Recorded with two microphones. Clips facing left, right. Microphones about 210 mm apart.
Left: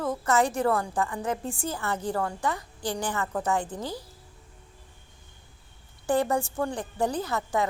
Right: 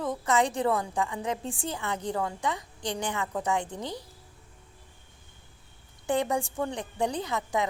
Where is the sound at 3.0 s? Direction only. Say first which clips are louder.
Left 1 dB; 15° right (ahead or behind).